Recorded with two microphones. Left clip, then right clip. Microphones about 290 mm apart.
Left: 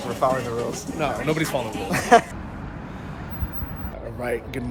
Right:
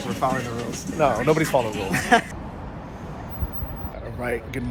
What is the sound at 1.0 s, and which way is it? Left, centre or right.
Speech, centre.